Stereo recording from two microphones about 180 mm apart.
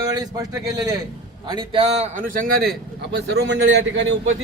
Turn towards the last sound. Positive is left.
turn(degrees=-75)  # may be behind; listen again after turning